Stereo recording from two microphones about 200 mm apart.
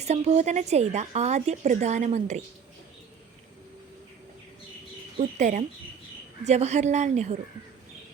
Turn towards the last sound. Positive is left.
turn(degrees=-35)  # may be behind; listen again after turning